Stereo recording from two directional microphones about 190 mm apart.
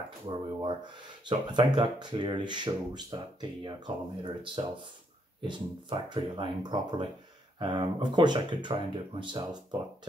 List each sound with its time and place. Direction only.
0.3 s speech: 25° right (ahead or behind)
5.5 s speech: 25° right (ahead or behind)